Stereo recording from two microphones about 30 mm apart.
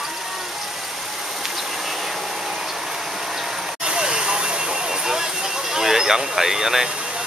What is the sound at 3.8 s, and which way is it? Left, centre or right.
Vehicle, right.